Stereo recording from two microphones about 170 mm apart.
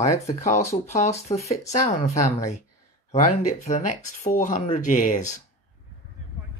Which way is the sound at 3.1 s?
40° left (ahead or behind).